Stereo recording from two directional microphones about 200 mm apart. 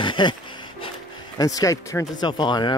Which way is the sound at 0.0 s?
25° left (ahead or behind).